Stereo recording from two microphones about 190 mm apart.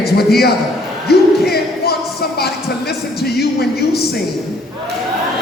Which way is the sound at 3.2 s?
55° left (ahead or behind).